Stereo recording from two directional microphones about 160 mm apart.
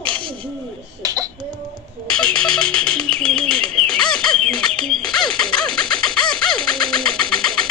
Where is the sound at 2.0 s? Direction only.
5° left (ahead or behind).